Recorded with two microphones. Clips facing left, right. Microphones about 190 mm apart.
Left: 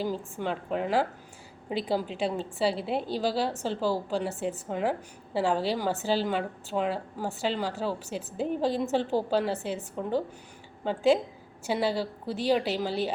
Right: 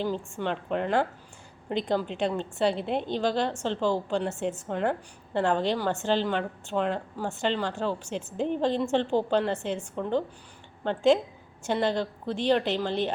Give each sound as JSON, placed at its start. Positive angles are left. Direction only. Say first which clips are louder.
{"t": 0.3, "sound": "a woman's voice", "louder": "right 1 dB", "side_deg": 5}